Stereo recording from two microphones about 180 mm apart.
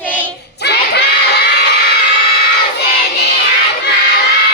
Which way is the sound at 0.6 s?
65° left (ahead or behind).